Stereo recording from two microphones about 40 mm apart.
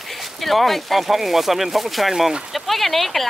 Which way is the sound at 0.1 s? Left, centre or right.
Centre.